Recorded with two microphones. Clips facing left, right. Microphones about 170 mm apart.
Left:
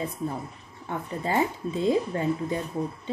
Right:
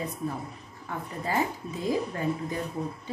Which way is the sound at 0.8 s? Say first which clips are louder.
Left 3 dB; 25° left (ahead or behind).